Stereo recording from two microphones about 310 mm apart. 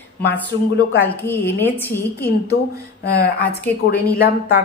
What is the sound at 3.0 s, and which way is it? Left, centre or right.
Speech, left.